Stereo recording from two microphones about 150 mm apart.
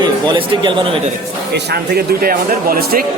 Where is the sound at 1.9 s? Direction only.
80° right.